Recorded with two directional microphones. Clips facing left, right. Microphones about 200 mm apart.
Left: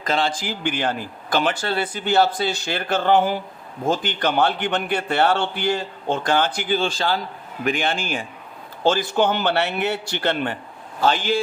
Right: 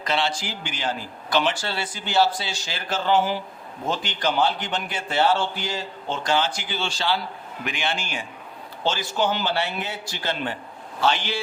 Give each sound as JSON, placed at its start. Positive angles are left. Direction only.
{"t": 0.0, "sound": "a man's voice", "side_deg": 45}
{"t": 11.0, "sound": "a man's voice", "side_deg": 45}